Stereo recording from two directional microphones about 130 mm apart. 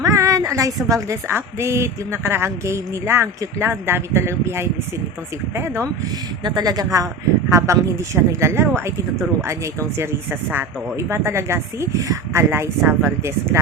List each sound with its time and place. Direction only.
0.0 s a woman's voice: 25° right (ahead or behind)
6.4 s a woman's voice: 30° right (ahead or behind)